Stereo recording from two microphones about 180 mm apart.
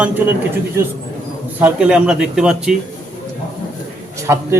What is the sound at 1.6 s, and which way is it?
Speech, 10° right (ahead or behind).